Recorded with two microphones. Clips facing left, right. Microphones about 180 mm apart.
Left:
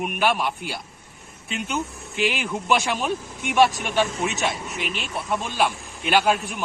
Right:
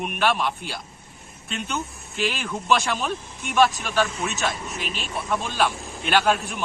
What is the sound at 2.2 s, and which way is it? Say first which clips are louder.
Speech: left 2 dB; 15° left (ahead or behind).